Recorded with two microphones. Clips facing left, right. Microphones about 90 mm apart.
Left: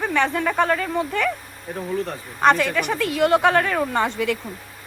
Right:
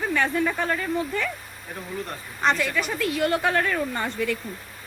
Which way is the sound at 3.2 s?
90° left.